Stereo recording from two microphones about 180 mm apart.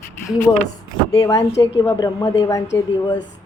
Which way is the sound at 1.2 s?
20° left (ahead or behind).